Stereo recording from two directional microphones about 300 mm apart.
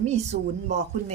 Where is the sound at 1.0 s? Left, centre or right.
Centre.